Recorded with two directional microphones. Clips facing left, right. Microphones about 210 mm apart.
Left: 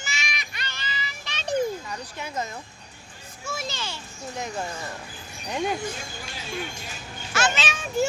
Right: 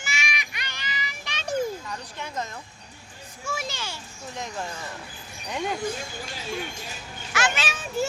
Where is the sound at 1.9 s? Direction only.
5° left (ahead or behind).